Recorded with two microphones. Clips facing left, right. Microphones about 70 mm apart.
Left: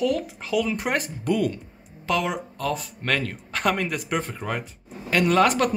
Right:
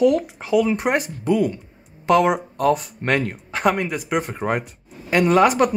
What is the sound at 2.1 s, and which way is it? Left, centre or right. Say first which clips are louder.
Speech: right 8 dB; right.